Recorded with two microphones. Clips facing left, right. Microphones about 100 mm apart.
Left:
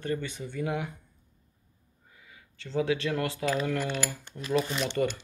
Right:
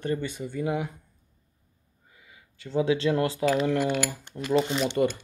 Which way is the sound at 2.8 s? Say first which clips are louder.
Right 5 dB; 25° right (ahead or behind).